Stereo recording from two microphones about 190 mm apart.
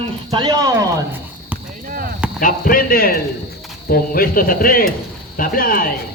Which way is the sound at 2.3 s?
45° left (ahead or behind).